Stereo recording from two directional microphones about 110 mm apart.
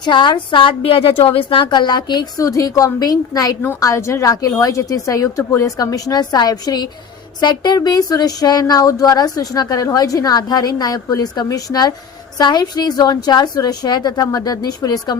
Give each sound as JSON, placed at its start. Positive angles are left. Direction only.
{"t": 0.0, "sound": "a woman's voice", "side_deg": 45}